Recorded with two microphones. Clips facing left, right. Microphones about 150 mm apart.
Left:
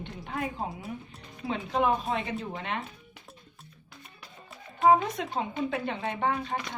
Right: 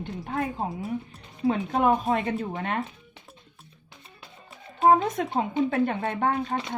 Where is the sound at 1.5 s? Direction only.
45° right (ahead or behind).